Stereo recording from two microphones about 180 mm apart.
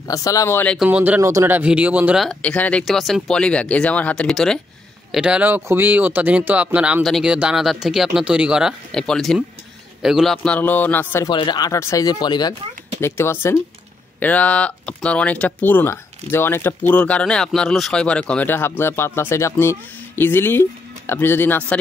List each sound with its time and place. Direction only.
0.1 s speech: 20° left (ahead or behind)
0.7 s speech: 10° right (ahead or behind); by 11.2 s 10° left (ahead or behind)
11.2 s speech: 25° left (ahead or behind)